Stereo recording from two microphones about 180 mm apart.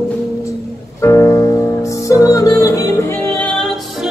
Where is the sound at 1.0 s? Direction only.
15° left (ahead or behind).